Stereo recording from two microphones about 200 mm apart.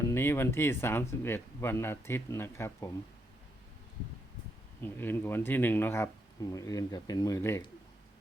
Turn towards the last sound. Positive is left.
turn(degrees=15)  # may be behind; listen again after turning